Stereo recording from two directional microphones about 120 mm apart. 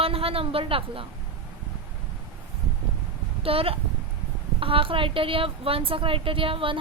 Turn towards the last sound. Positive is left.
turn(degrees=-45)  # may be behind; listen again after turning